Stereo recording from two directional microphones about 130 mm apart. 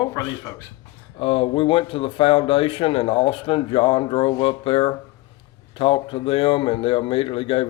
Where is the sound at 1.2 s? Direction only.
45° left (ahead or behind).